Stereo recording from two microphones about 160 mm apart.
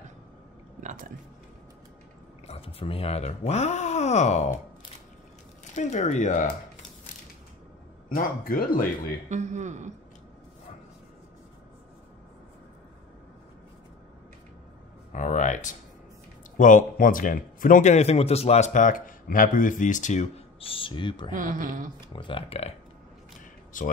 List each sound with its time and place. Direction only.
0.7 s a sound: 55° right (ahead or behind)
2.4 s speech: 35° left (ahead or behind)
5.8 s speech: 45° left (ahead or behind)
8.1 s speech: 65° left (ahead or behind)
9.3 s a man's voice: 50° right (ahead or behind)
15.1 s speech: 50° left (ahead or behind); by 21.3 s 30° left (ahead or behind)
21.3 s speech: 55° right (ahead or behind)
22.1 s speech: 30° left (ahead or behind)
23.7 s speech: 55° left (ahead or behind)